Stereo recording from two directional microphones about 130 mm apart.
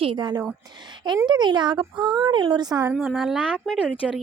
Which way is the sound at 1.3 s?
35° right (ahead or behind).